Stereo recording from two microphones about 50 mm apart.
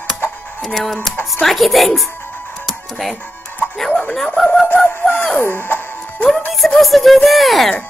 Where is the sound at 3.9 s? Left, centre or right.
Left.